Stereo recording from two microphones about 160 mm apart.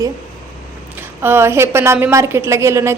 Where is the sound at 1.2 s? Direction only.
15° right (ahead or behind).